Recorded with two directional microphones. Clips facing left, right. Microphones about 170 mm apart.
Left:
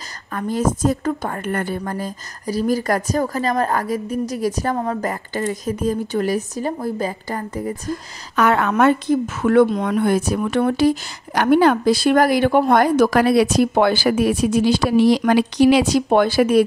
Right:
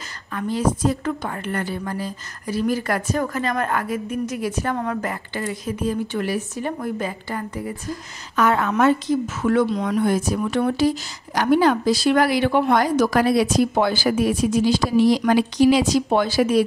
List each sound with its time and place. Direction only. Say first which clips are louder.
0.3 s a woman's voice: left 1 dB; 45° left (ahead or behind)
8.4 s a woman's voice: left 2 dB; 70° left (ahead or behind)